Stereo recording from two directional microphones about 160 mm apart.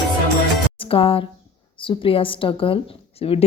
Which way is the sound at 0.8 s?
35° left (ahead or behind).